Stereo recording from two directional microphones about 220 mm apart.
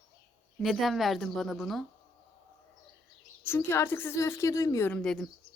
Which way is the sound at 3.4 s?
10° left (ahead or behind).